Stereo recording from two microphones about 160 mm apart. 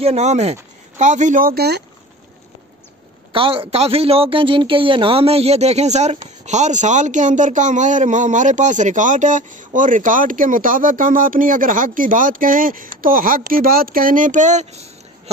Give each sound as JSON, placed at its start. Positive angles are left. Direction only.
{"t": 0.0, "sound": "speech", "side_deg": -45}
{"t": 3.3, "sound": "speech", "side_deg": -35}